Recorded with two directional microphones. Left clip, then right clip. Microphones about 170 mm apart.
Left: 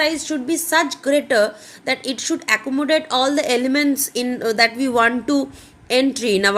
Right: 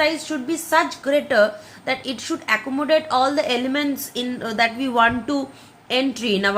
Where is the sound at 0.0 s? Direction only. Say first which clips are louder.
Left 1 dB; 35° left (ahead or behind).